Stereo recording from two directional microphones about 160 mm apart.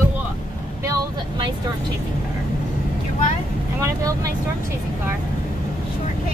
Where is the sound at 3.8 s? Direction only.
20° right (ahead or behind).